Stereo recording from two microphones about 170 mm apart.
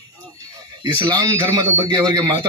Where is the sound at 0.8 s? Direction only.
20° right (ahead or behind).